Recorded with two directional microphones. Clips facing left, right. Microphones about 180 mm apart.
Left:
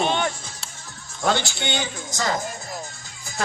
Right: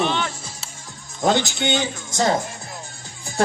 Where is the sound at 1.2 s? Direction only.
20° right (ahead or behind).